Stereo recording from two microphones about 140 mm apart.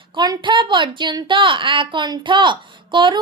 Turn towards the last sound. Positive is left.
turn(degrees=-35)  # may be behind; listen again after turning